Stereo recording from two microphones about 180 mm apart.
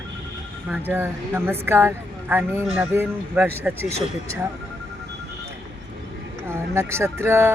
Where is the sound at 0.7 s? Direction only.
10° right (ahead or behind).